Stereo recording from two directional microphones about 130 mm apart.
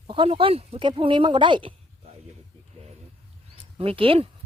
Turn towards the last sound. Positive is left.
turn(degrees=-45)  # may be behind; listen again after turning